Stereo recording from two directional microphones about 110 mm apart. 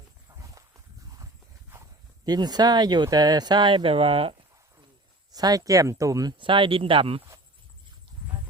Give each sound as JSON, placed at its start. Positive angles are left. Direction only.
{"t": 1.7, "sound": "speech", "side_deg": -35}
{"t": 5.3, "sound": "speech", "side_deg": -35}
{"t": 6.4, "sound": "speech", "side_deg": -50}